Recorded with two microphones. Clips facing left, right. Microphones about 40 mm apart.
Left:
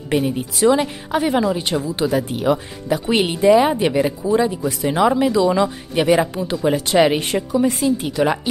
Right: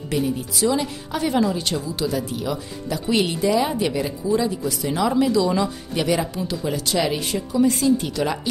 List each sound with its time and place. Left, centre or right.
0.1 s speech: left
1.2 s speech: left
7.5 s speech: left